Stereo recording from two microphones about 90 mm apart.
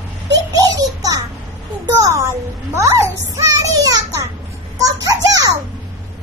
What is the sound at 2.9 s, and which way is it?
Child singing, 35° right (ahead or behind).